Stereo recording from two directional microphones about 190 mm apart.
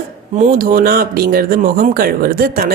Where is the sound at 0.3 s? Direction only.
45° right (ahead or behind).